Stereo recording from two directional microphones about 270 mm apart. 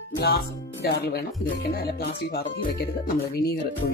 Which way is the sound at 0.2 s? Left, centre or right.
Left.